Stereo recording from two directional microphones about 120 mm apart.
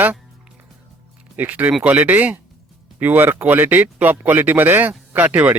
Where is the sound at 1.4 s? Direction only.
15° right (ahead or behind).